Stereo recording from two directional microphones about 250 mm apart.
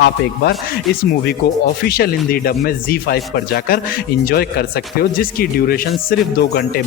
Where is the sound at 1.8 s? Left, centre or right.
Left.